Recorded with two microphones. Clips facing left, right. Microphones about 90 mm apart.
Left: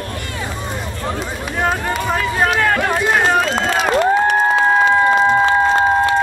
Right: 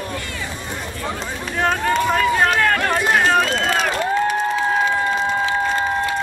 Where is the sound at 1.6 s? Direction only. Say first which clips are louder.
Right 1 dB; 5° left (ahead or behind).